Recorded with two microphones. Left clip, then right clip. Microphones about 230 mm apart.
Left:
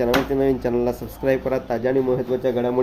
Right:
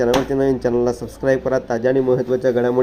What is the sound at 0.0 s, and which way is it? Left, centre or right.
Speech, centre.